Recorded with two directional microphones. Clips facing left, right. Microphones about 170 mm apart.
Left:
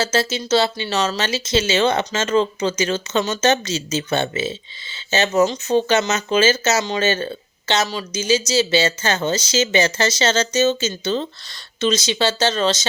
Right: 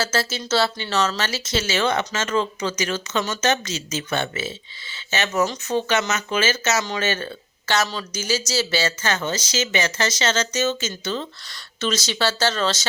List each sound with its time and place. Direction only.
0.0 s speech: 20° left (ahead or behind)